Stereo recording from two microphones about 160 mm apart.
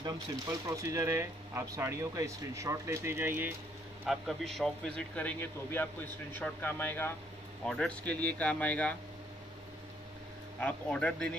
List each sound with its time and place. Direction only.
0.0 s speech: 20° right (ahead or behind)
4.0 s a man's voice: centre (ahead or behind)
10.6 s a man's voice: 10° left (ahead or behind)